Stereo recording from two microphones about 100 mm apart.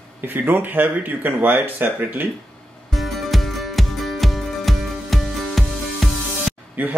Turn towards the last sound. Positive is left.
turn(degrees=-20)  # may be behind; listen again after turning